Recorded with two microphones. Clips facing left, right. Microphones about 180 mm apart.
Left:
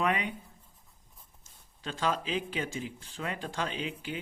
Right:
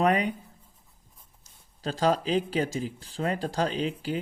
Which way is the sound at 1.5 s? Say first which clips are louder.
Right 7 dB; 35° right (ahead or behind).